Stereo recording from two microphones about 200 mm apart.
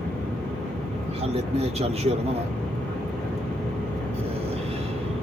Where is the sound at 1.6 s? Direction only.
30° right (ahead or behind).